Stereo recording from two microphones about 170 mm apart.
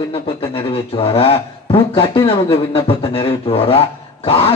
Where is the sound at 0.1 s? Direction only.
30° left (ahead or behind).